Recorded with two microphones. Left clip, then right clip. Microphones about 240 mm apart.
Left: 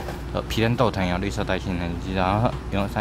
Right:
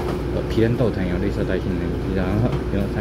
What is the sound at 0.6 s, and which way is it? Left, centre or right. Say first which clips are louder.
Speech: right 1 dB; left.